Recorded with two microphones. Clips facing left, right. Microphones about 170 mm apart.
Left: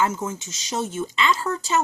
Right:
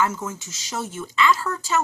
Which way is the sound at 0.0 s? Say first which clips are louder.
Left 1 dB; 20° left (ahead or behind).